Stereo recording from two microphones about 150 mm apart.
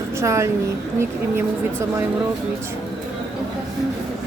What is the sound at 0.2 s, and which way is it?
Speech, 20° right (ahead or behind).